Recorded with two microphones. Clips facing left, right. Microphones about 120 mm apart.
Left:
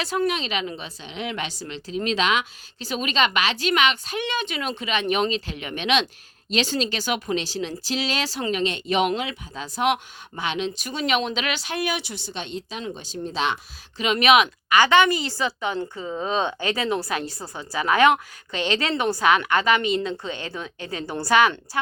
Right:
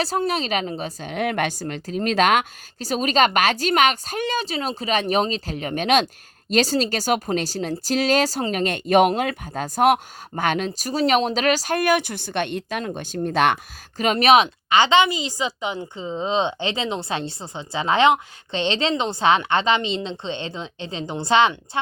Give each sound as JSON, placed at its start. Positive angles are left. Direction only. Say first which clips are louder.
{"t": 0.0, "sound": "speech", "louder": "right 2 dB", "side_deg": -35}